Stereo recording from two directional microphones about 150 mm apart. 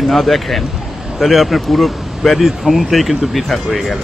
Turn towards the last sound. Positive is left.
turn(degrees=0)  # may be behind; listen again after turning